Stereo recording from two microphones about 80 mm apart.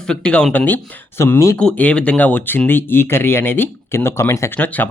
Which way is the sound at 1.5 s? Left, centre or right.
Centre.